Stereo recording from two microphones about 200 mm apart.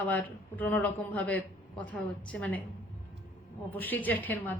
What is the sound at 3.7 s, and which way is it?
Speech, 10° left (ahead or behind).